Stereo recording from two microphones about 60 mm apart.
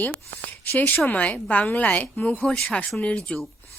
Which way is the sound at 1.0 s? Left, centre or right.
Left.